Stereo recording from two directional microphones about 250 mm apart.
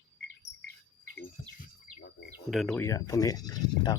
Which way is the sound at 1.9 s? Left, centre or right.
Left.